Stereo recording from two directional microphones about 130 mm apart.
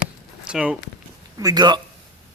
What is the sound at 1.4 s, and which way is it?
Speech, 30° right (ahead or behind).